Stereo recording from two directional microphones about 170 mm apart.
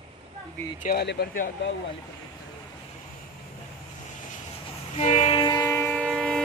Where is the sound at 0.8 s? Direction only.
65° left (ahead or behind).